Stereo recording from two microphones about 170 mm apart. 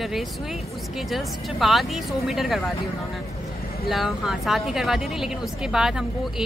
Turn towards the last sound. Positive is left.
turn(degrees=-5)  # may be behind; listen again after turning